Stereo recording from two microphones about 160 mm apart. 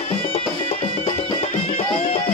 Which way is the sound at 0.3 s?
40° left (ahead or behind).